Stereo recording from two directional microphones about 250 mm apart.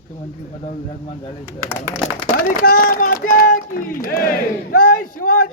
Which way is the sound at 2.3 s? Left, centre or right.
Left.